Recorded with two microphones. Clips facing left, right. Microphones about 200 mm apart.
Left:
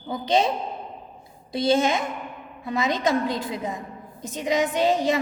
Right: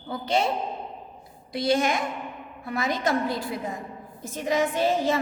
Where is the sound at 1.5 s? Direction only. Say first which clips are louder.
Left 3 dB; 25° left (ahead or behind).